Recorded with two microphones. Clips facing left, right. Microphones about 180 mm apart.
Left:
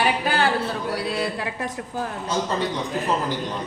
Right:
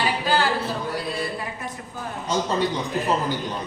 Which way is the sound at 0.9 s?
85° left.